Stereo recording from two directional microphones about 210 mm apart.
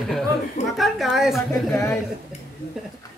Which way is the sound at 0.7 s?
Centre (ahead or behind).